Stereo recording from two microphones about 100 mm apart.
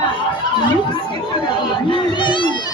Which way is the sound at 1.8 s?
55° left (ahead or behind).